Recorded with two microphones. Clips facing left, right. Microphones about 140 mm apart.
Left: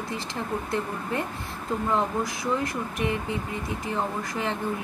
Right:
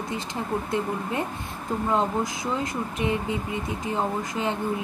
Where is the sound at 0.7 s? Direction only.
20° right (ahead or behind).